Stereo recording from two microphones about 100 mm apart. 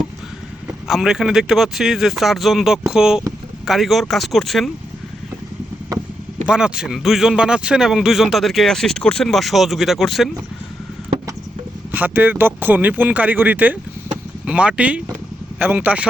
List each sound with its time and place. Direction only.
0.9 s speech: 5° right (ahead or behind)
6.4 s speech: 10° right (ahead or behind)
11.9 s speech: 20° right (ahead or behind)